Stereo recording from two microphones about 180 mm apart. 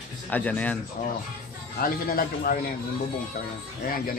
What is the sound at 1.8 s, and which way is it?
Speech, 50° left (ahead or behind).